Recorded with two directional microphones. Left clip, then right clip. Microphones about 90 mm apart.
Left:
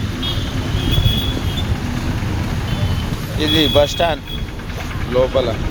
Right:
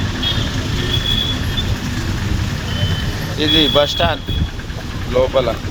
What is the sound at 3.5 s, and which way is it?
Speech, 15° left (ahead or behind).